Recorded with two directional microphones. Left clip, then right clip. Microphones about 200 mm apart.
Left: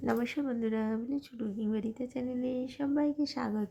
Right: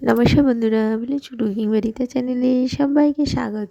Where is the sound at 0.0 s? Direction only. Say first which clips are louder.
Right 17 dB; 40° right (ahead or behind).